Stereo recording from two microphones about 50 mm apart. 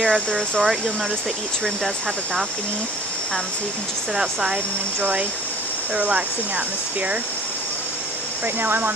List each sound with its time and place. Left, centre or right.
0.0 s speech: centre
4.2 s speech: centre
5.9 s speech: right
8.5 s speech: right